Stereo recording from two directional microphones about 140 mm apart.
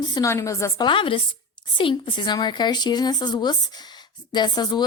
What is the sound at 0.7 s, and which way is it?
A woman's voice, 35° left (ahead or behind).